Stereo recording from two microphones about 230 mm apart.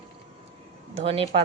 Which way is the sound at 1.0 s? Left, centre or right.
Right.